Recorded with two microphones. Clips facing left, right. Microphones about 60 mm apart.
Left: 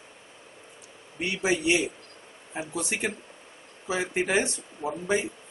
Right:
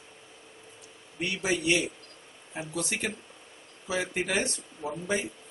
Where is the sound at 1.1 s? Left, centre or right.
Left.